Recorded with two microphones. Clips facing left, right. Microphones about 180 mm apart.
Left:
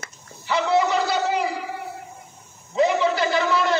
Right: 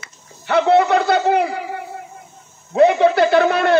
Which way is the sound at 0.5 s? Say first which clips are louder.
Right 6 dB; 60° right (ahead or behind).